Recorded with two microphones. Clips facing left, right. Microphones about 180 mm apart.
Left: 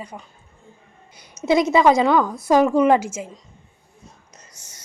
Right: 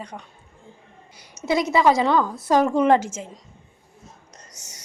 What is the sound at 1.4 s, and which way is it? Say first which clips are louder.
A woman's voice: left 3 dB; 20° left (ahead or behind).